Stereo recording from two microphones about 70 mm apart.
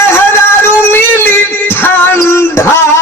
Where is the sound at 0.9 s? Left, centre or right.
Left.